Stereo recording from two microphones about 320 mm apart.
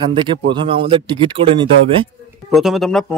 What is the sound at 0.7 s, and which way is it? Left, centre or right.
Speech, centre.